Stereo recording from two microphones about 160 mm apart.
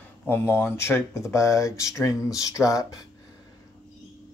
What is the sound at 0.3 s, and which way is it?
Speech, 15° left (ahead or behind).